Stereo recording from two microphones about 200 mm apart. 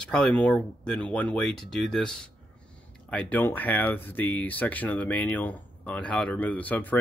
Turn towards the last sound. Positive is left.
turn(degrees=10)  # may be behind; listen again after turning